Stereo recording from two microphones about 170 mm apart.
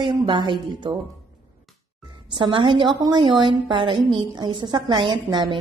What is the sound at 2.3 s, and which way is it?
A woman's voice, 30° right (ahead or behind).